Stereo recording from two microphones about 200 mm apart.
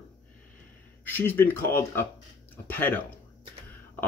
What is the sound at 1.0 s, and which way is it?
Speech, 10° left (ahead or behind).